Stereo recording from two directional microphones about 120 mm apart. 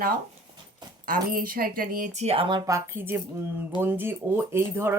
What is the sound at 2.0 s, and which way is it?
Speech, 75° right (ahead or behind).